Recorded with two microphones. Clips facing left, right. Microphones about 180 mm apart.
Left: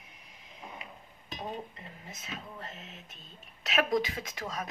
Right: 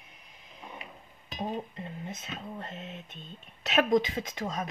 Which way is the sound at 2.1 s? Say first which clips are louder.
Right 4 dB; 30° right (ahead or behind).